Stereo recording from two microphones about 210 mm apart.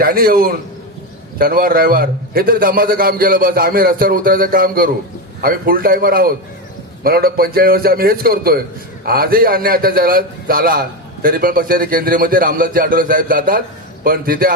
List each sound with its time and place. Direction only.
0.0 s a man's voice: 45° right (ahead or behind)